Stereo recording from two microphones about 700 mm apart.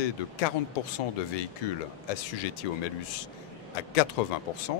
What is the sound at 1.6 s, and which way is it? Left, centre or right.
A man's voice, left.